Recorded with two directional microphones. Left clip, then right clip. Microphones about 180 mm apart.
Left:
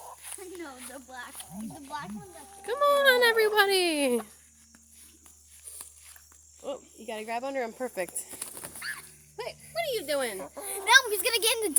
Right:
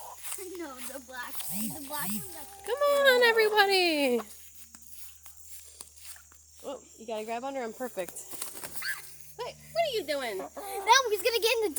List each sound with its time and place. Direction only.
0.0 s a sound: 25° right (ahead or behind)
0.8 s speech: 30° right (ahead or behind)
1.3 s speech: 40° right (ahead or behind)
2.3 s speech: 30° right (ahead or behind)
2.6 s speech: 5° left (ahead or behind)
6.6 s speech: 45° left (ahead or behind)
8.4 s a sound: 10° right (ahead or behind)
8.8 s a sound: 5° left (ahead or behind)
9.4 s speech: 35° left (ahead or behind)
10.3 s speech: 15° right (ahead or behind)
10.8 s speech: 45° left (ahead or behind)